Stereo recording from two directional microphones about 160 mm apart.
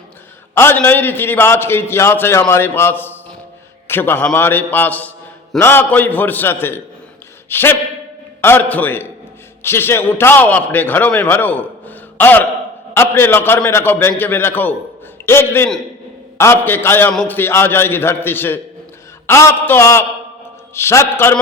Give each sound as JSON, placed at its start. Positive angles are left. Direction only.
{"t": 0.5, "sound": "a man's voice", "side_deg": 15}